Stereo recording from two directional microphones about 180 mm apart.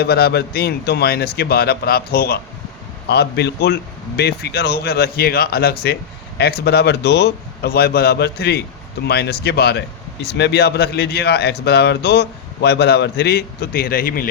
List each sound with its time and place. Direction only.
0.0 s speech: 60° left (ahead or behind)